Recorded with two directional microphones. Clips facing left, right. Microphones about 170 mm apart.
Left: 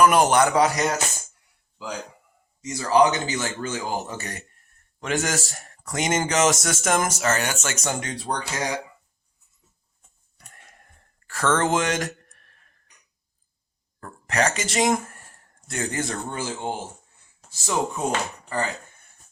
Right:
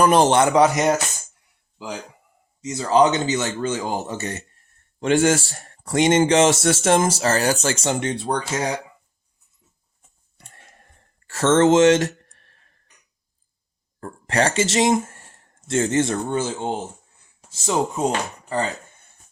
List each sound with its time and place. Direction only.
0.0 s speech: 30° right (ahead or behind)
2.6 s speech: 25° right (ahead or behind)
10.3 s a sound: 25° right (ahead or behind)
11.3 s speech: 25° right (ahead or behind)
14.0 s speech: 30° right (ahead or behind)